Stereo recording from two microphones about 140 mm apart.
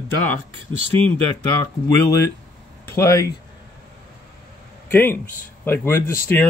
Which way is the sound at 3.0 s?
20° left (ahead or behind).